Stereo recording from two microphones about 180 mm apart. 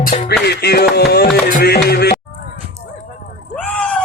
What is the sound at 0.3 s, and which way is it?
Music, 65° left (ahead or behind).